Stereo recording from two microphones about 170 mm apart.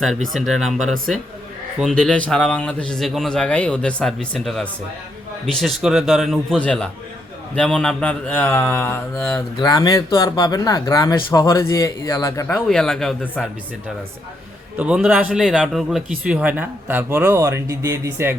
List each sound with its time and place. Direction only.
0.3 s a man's voice: centre (ahead or behind)
9.6 s speech: 25° left (ahead or behind)
12.5 s a man's voice: 5° left (ahead or behind)
14.8 s a man's voice: 5° right (ahead or behind)